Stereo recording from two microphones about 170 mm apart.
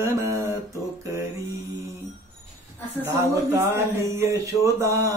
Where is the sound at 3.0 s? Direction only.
15° right (ahead or behind).